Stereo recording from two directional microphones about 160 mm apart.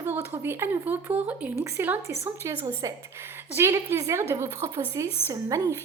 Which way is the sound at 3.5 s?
15° right (ahead or behind).